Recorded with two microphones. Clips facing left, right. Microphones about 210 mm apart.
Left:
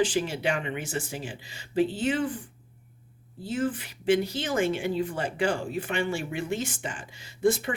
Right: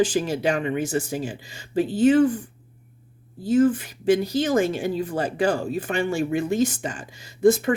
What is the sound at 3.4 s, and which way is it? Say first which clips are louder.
Speech: right 10 dB; 45° right (ahead or behind).